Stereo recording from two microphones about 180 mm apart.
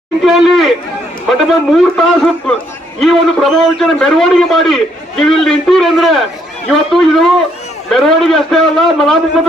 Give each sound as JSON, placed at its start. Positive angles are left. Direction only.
{"t": 0.3, "sound": "a man's voice", "side_deg": 0}